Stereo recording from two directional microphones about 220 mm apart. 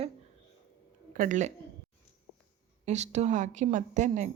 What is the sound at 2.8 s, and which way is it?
Speech, 30° right (ahead or behind).